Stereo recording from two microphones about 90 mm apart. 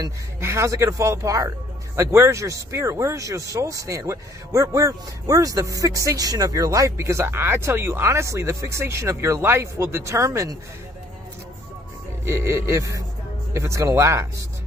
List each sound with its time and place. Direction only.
0.4 s speech: 30° right (ahead or behind)
2.0 s speech: 30° right (ahead or behind)
12.3 s speech: 30° right (ahead or behind)